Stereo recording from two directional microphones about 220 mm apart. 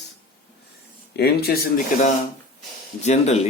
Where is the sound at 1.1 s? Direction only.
45° left (ahead or behind).